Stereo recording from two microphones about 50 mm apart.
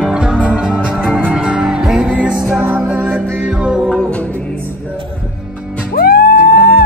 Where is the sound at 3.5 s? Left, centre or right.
Centre.